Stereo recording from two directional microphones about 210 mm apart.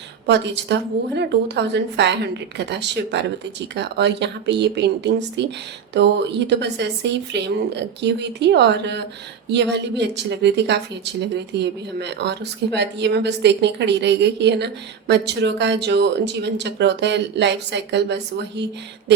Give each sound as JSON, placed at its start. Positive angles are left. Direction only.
{"t": 0.3, "sound": "speech", "side_deg": -55}